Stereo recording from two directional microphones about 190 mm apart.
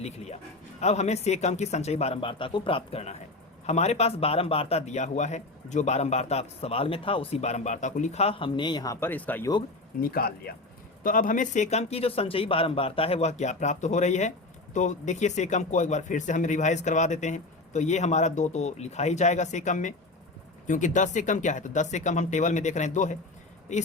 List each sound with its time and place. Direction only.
0.8 s speech: 35° left (ahead or behind); by 9.5 s 10° left (ahead or behind)
10.0 s speech: 55° left (ahead or behind)